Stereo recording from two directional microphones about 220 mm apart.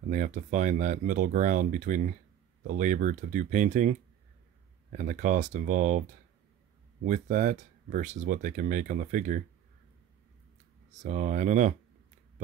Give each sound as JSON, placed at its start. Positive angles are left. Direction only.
{"t": 0.1, "sound": "speech", "side_deg": -35}
{"t": 4.9, "sound": "speech", "side_deg": -35}
{"t": 7.1, "sound": "speech", "side_deg": -35}
{"t": 11.1, "sound": "speech", "side_deg": -35}